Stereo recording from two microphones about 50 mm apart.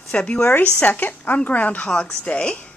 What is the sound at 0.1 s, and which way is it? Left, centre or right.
Speech, left.